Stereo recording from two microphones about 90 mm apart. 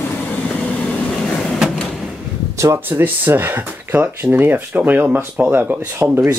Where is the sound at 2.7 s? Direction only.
20° right (ahead or behind).